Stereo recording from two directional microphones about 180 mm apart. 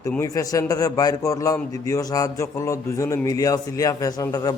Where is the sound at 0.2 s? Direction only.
20° left (ahead or behind).